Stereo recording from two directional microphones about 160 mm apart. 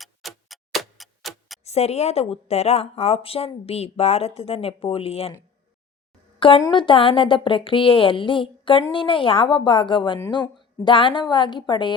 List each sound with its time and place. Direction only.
0.0 s tick-tock: centre (ahead or behind)
1.6 s a woman's voice: 40° left (ahead or behind)
6.6 s a woman's voice: 30° left (ahead or behind)